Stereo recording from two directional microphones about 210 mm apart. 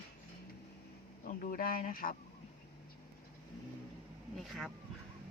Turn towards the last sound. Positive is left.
turn(degrees=0)  # may be behind; listen again after turning